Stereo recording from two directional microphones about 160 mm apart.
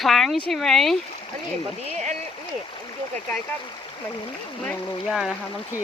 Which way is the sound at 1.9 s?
45° right (ahead or behind).